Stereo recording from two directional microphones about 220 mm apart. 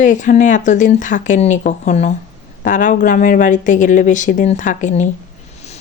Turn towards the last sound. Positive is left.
turn(degrees=35)  # may be behind; listen again after turning